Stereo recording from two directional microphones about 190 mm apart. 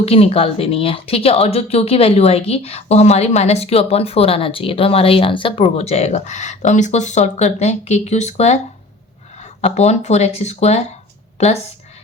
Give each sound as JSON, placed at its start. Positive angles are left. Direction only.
{"t": 0.0, "sound": "speech", "side_deg": 30}